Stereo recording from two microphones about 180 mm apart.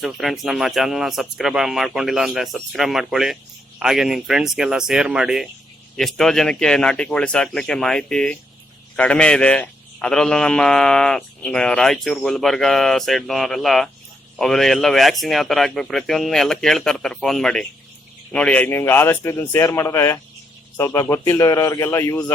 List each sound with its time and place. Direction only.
0.0 s a man's voice: centre (ahead or behind); by 22.3 s 15° left (ahead or behind)